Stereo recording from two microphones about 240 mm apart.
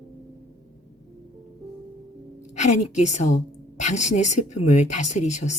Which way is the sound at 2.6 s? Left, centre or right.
Left.